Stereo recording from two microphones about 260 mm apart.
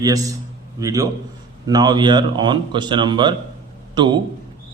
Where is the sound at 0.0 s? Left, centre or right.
Centre.